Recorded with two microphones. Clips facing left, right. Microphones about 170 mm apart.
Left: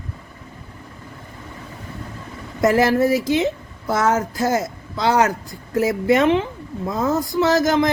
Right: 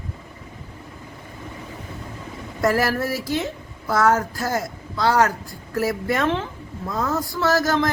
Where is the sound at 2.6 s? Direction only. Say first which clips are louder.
Left 5 dB; 20° left (ahead or behind).